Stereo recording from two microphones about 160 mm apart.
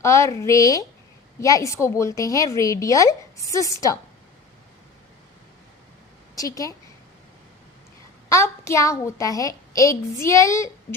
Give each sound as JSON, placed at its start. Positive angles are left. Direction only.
{"t": 0.0, "sound": "a woman's voice", "side_deg": 20}
{"t": 6.3, "sound": "a woman's voice", "side_deg": 20}
{"t": 8.3, "sound": "a woman's voice", "side_deg": 20}